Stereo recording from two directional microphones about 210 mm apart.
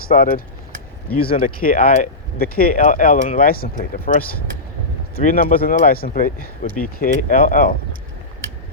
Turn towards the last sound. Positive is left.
turn(degrees=45)  # may be behind; listen again after turning